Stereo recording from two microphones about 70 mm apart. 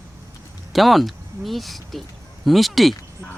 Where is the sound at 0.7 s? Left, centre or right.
Centre.